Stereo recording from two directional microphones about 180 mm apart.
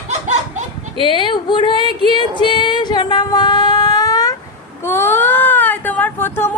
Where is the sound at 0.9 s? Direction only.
25° left (ahead or behind).